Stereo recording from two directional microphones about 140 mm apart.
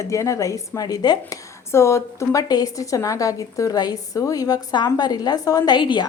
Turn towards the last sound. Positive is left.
turn(degrees=35)  # may be behind; listen again after turning